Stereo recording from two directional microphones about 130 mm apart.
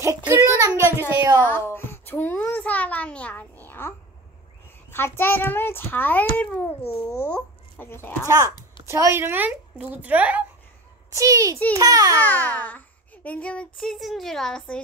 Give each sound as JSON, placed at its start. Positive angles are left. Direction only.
{"t": 0.0, "sound": "a child's voice", "side_deg": -20}
{"t": 0.6, "sound": "a sound", "side_deg": -25}
{"t": 1.4, "sound": "a child's voice", "side_deg": 15}
{"t": 1.8, "sound": "a sound", "side_deg": 15}
{"t": 4.9, "sound": "a child's voice", "side_deg": 15}
{"t": 8.3, "sound": "a child's voice", "side_deg": -25}
{"t": 11.1, "sound": "a child's voice", "side_deg": -25}
{"t": 12.2, "sound": "a child's voice", "side_deg": 15}